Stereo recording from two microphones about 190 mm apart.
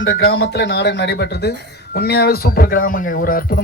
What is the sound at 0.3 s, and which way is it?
A man's voice, 70° left (ahead or behind).